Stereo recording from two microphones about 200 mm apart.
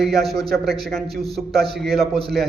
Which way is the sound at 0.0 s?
Centre (ahead or behind).